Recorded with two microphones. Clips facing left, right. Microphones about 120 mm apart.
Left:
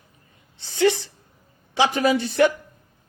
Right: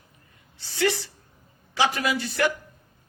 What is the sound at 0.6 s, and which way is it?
Speech, 20° left (ahead or behind).